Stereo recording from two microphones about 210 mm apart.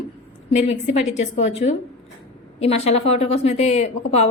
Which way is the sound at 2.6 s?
30° left (ahead or behind).